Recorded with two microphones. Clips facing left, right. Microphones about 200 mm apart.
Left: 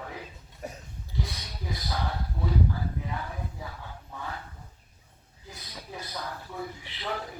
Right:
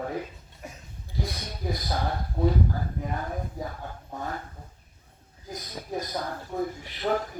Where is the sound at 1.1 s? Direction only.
40° right (ahead or behind).